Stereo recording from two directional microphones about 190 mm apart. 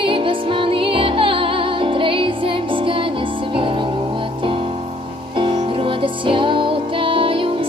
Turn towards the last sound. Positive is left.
turn(degrees=-30)  # may be behind; listen again after turning